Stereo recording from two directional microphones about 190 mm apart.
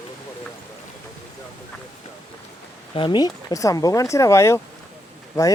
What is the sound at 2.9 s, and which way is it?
Speech, 25° left (ahead or behind).